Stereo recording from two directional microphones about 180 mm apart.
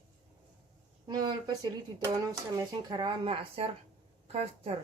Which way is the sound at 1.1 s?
25° right (ahead or behind).